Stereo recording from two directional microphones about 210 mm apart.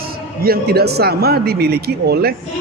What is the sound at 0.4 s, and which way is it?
A man's voice, 45° right (ahead or behind).